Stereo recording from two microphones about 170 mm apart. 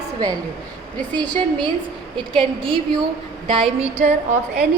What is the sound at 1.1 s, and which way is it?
A woman's voice, 25° right (ahead or behind).